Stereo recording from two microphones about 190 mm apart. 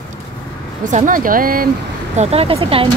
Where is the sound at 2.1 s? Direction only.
30° right (ahead or behind).